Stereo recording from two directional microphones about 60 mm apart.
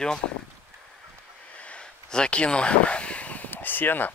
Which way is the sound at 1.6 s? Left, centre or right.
Centre.